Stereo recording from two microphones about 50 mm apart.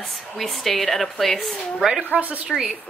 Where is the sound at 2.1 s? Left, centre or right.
Right.